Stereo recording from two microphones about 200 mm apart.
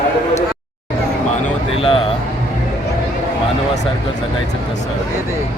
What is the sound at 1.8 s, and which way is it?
Music, 25° left (ahead or behind).